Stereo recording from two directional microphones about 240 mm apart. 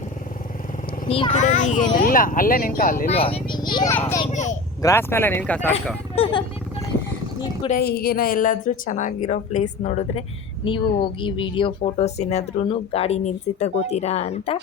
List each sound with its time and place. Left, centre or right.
1.0 s a woman's voice: left
3.2 s speech: left; by 4.2 s centre
4.3 s speech: left
4.8 s speech: centre
6.1 s speech: left
7.7 s a woman's voice: left